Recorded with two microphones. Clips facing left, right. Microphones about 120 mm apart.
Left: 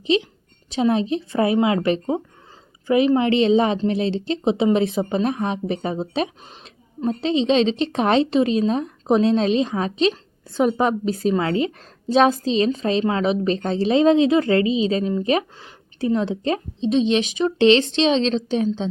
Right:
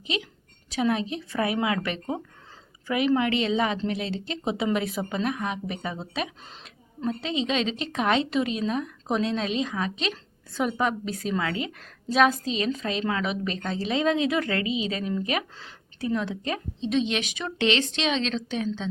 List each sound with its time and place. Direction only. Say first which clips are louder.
0.0 s a woman's voice: left 12 dB; 25° left (ahead or behind)